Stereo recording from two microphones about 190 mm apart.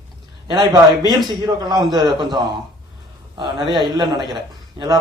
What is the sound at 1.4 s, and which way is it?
Speech, 20° right (ahead or behind).